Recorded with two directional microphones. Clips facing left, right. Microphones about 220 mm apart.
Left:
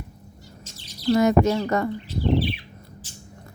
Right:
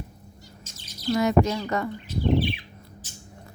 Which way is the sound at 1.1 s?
45° left (ahead or behind).